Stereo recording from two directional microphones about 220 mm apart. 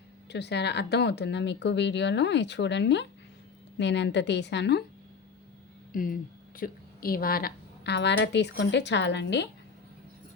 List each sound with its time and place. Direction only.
0.3 s a woman's voice: 50° left (ahead or behind)
5.9 s a woman's voice: 40° left (ahead or behind)